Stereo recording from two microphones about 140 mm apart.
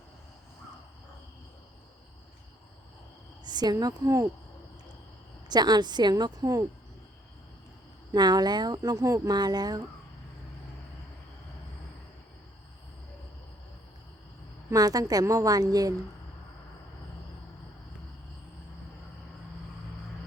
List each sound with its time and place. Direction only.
3.4 s speech: 30° right (ahead or behind)
5.5 s speech: 30° right (ahead or behind)
8.1 s speech: 30° right (ahead or behind)
14.7 s speech: 25° right (ahead or behind)